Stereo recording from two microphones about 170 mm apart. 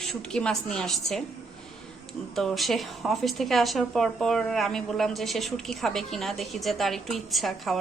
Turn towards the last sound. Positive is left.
turn(degrees=0)  # may be behind; listen again after turning